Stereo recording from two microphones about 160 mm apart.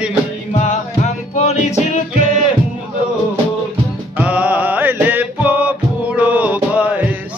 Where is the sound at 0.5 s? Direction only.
45° left (ahead or behind).